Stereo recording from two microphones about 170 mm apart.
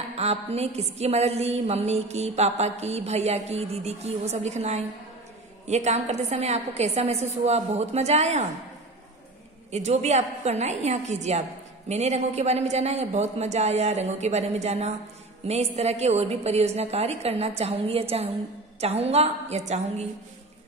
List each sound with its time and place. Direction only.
0.1 s a woman's voice: 35° right (ahead or behind)
9.7 s a woman's voice: 40° right (ahead or behind)